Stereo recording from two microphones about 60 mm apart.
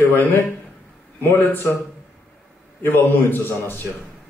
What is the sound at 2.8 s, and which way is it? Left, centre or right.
Speech, left.